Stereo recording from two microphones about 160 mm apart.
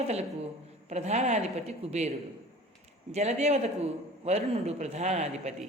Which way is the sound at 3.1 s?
45° right (ahead or behind).